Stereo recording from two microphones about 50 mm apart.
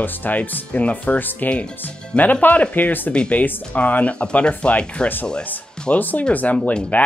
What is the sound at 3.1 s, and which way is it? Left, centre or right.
Speech, left.